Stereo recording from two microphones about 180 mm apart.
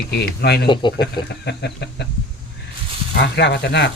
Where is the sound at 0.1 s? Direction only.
65° left (ahead or behind).